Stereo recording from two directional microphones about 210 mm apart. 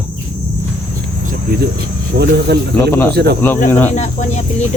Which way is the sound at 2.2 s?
50° right (ahead or behind).